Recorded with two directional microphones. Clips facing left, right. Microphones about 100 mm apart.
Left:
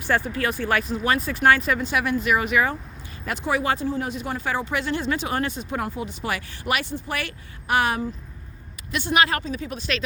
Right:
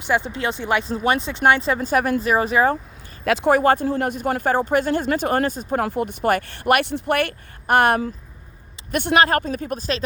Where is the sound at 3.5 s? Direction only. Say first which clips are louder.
Right 6 dB; 50° right (ahead or behind).